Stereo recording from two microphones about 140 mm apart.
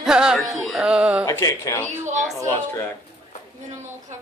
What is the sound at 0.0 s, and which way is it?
Music, 5° right (ahead or behind).